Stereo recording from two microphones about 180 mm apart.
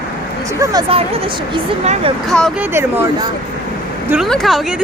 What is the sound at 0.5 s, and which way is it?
Speech, 15° right (ahead or behind).